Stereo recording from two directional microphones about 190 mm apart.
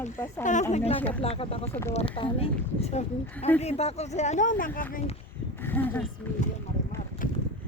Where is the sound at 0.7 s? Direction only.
35° left (ahead or behind).